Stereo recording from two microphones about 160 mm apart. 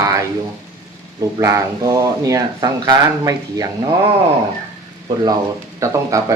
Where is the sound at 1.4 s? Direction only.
20° right (ahead or behind).